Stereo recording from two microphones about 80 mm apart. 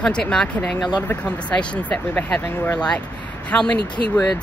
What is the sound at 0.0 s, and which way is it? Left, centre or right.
Speech, centre.